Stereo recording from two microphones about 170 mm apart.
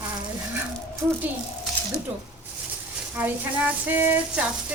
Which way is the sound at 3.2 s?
10° right (ahead or behind).